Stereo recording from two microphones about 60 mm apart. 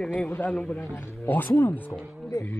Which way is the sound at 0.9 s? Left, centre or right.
Left.